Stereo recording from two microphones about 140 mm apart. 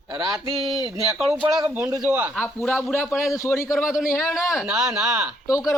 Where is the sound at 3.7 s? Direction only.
5° right (ahead or behind).